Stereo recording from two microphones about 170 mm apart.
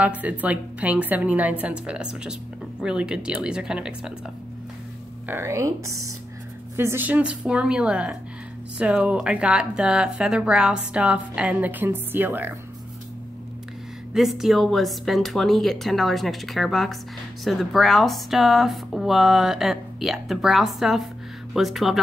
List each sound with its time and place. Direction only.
0.0 s a woman's voice: 10° right (ahead or behind)
5.3 s a woman's voice: 15° right (ahead or behind)
14.1 s speech: centre (ahead or behind)